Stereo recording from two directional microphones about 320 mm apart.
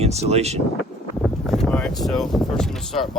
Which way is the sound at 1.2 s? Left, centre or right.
Centre.